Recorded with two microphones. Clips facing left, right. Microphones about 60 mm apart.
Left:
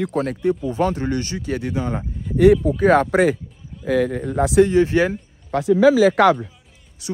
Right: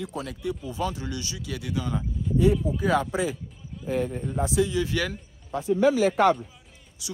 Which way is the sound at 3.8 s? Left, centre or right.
Left.